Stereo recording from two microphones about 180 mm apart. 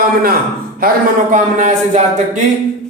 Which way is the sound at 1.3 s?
45° right (ahead or behind).